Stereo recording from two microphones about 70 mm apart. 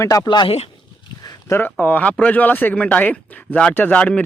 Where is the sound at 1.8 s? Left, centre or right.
Left.